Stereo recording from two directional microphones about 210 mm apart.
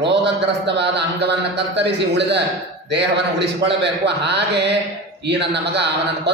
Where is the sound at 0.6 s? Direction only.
55° right (ahead or behind).